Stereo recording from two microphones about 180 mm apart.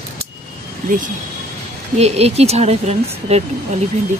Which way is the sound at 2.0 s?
35° right (ahead or behind).